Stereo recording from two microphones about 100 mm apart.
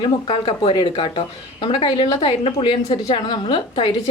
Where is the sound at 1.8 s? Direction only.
45° left (ahead or behind).